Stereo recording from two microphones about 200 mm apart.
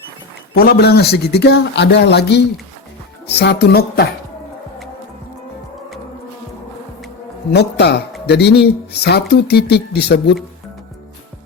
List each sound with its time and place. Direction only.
0.5 s speech: 50° left (ahead or behind)
7.5 s speech: 55° left (ahead or behind)